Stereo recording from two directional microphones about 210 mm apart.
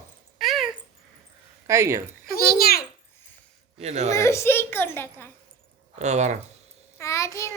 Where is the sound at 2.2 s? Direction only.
45° left (ahead or behind).